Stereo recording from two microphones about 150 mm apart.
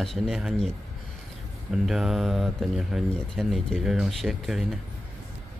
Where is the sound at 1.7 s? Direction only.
Centre (ahead or behind).